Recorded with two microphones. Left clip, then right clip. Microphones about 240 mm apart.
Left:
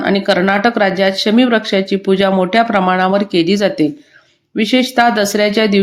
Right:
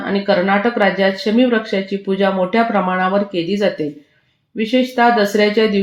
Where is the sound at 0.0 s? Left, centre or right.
Left.